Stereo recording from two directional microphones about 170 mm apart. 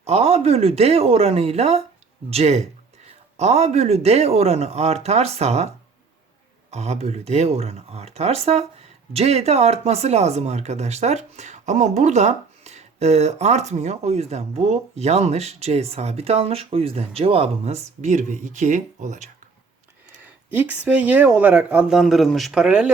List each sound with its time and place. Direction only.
0.0 s speech: 35° right (ahead or behind)
20.6 s speech: 10° right (ahead or behind)